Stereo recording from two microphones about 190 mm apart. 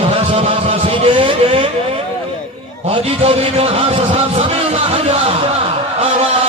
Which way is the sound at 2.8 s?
30° right (ahead or behind).